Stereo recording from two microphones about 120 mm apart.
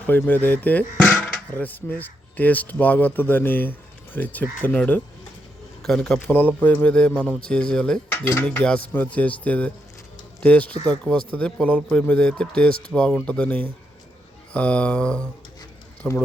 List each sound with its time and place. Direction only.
0.1 s a man's voice: 15° left (ahead or behind)
6.1 s a man's voice: 15° left (ahead or behind)
8.1 s dishes: 20° left (ahead or behind)
8.4 s a man's voice: 10° left (ahead or behind)